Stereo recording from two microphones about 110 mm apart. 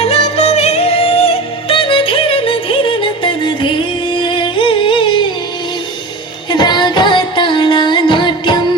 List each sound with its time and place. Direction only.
0.0 s music: 75° left (ahead or behind); by 5.3 s 50° left (ahead or behind)
6.5 s music: 40° left (ahead or behind)